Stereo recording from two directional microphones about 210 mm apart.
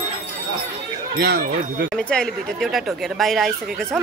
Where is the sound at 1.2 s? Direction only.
50° right (ahead or behind).